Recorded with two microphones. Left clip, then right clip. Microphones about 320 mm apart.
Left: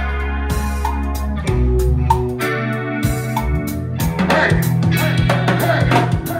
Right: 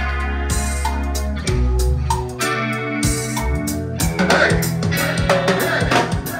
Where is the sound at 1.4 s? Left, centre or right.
Centre.